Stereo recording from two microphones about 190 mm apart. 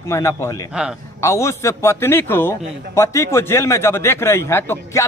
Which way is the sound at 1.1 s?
15° left (ahead or behind).